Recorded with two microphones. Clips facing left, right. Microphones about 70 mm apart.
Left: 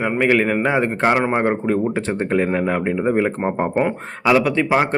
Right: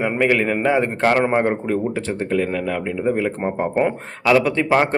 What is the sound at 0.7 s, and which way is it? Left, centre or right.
Speech, centre.